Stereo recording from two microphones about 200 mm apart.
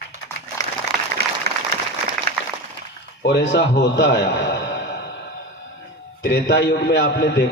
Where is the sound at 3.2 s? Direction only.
60° left (ahead or behind).